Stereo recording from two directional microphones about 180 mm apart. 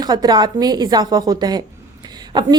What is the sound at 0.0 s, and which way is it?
A woman's voice, 25° right (ahead or behind).